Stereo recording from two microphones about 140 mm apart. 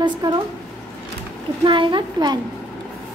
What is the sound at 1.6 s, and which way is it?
Speech, 35° right (ahead or behind).